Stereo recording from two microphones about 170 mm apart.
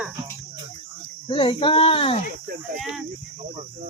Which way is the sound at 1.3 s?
35° left (ahead or behind).